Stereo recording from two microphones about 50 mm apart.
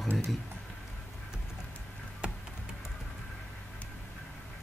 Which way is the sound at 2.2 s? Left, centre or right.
Right.